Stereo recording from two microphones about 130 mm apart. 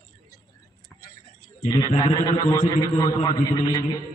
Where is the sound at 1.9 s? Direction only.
30° left (ahead or behind).